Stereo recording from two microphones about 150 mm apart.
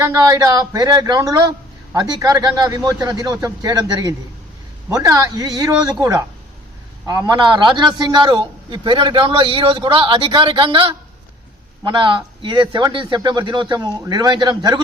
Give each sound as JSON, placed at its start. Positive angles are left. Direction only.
{"t": 0.3, "sound": "a man's voice", "side_deg": -25}